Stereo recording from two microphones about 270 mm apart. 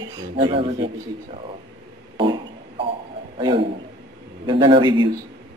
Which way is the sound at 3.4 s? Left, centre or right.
Centre.